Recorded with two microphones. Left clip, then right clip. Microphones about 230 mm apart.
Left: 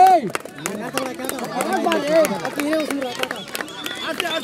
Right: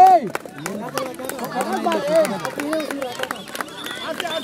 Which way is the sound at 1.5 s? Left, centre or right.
Left.